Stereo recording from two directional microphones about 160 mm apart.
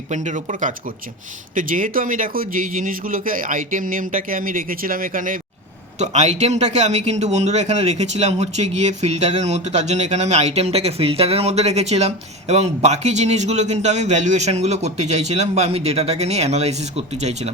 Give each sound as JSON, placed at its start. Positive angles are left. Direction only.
{"t": 0.1, "sound": "a man's voice", "side_deg": -50}
{"t": 6.0, "sound": "a man's voice", "side_deg": -45}